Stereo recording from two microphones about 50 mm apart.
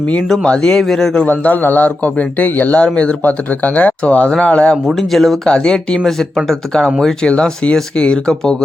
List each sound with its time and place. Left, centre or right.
0.4 s speech: centre
1.3 s speech: left
4.9 s speech: centre
5.5 s speech: centre
7.3 s speech: left